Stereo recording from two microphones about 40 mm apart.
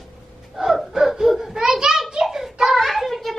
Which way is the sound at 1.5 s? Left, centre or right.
Centre.